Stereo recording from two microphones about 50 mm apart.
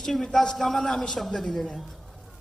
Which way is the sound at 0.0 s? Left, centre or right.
Centre.